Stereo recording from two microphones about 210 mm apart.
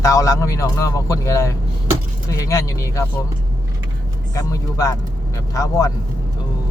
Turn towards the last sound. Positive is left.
turn(degrees=15)  # may be behind; listen again after turning